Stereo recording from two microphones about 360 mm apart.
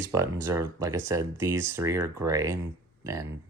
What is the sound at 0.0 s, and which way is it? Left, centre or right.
Speech, centre.